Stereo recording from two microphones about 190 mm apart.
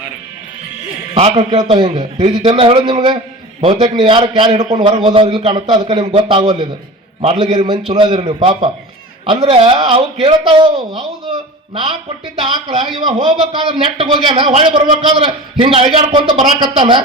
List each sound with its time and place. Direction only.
1.1 s a man's voice: 35° right (ahead or behind)
7.5 s a man's voice: 20° right (ahead or behind)
12.6 s a man's voice: 25° right (ahead or behind)